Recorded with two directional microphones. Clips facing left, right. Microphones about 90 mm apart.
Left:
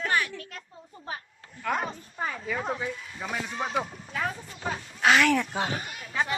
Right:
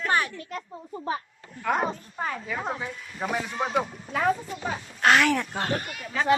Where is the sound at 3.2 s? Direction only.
35° right (ahead or behind).